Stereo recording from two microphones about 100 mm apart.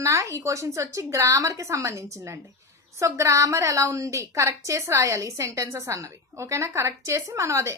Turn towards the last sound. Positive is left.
turn(degrees=-30)  # may be behind; listen again after turning